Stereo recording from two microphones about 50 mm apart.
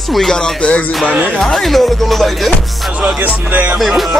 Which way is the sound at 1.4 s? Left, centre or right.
Centre.